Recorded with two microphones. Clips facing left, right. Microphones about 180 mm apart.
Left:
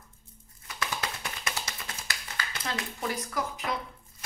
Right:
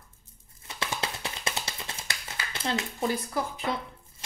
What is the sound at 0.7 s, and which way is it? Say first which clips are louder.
Tap: right 1 dB; 25° right (ahead or behind).